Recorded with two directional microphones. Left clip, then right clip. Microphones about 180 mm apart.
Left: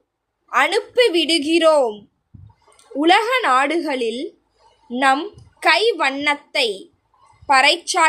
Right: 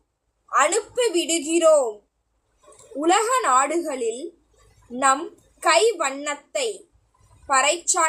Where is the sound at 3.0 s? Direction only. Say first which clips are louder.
Left 4 dB; 25° left (ahead or behind).